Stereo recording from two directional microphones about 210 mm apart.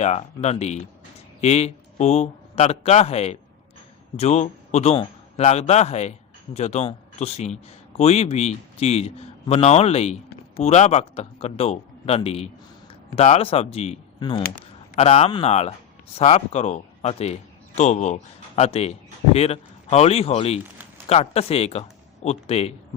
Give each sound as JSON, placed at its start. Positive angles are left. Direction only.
{"t": 0.0, "sound": "a man's voice", "side_deg": 30}